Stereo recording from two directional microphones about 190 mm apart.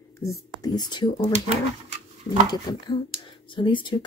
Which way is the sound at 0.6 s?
20° left (ahead or behind).